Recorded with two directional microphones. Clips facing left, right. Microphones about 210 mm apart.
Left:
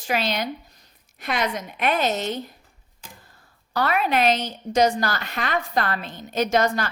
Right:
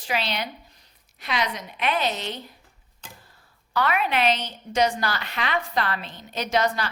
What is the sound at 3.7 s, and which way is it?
A woman's voice, 40° left (ahead or behind).